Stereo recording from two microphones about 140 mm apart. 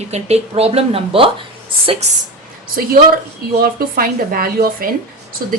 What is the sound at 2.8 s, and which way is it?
A woman's voice, 90° right.